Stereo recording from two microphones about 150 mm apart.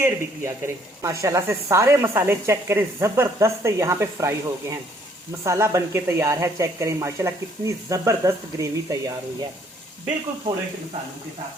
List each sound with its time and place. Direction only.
0.0 s a woman's voice: 15° right (ahead or behind)